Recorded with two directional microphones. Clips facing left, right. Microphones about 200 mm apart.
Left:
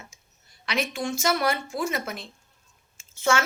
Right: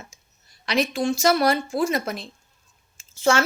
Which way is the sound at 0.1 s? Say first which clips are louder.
Right 2 dB; 35° right (ahead or behind).